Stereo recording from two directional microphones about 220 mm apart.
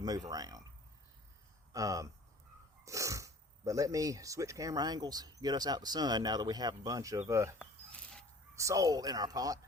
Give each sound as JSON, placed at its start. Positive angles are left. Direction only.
{"t": 0.3, "sound": "speech", "side_deg": -15}
{"t": 1.7, "sound": "speech", "side_deg": -15}
{"t": 7.6, "sound": "a sound", "side_deg": 5}
{"t": 8.5, "sound": "speech", "side_deg": -15}